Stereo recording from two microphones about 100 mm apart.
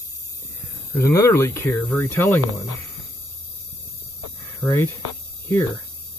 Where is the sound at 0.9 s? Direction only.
30° left (ahead or behind).